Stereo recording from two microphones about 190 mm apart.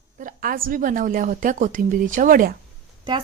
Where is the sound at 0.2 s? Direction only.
45° right (ahead or behind).